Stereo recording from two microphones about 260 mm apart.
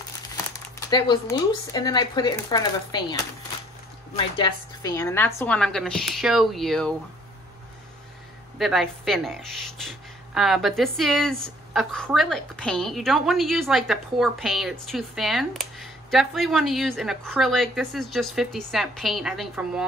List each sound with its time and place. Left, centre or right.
0.7 s speech: centre
4.2 s speech: centre
8.5 s speech: centre